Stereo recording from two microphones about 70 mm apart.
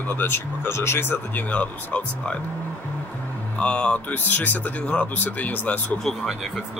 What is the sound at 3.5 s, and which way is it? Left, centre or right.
Speech, centre.